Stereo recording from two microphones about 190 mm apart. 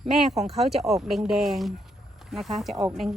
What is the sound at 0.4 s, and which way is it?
Speech, centre (ahead or behind).